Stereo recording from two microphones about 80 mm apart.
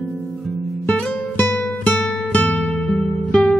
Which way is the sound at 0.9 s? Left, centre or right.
Centre.